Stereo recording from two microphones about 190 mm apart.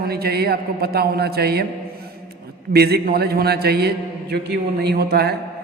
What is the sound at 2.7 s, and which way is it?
A man's voice, 55° right (ahead or behind).